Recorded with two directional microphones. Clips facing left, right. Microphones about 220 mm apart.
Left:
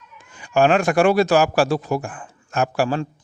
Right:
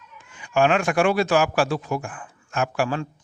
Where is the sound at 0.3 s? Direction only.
40° left (ahead or behind).